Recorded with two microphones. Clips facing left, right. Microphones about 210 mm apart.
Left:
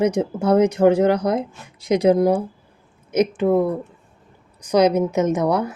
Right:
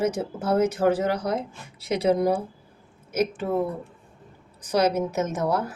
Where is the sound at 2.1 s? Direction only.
10° left (ahead or behind).